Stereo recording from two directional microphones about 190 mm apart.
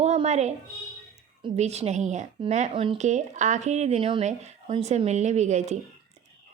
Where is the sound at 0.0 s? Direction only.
35° right (ahead or behind).